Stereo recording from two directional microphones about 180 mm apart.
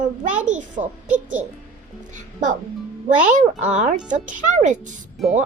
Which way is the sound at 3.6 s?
40° right (ahead or behind).